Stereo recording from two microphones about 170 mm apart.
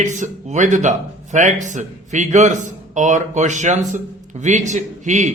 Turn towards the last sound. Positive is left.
turn(degrees=-45)  # may be behind; listen again after turning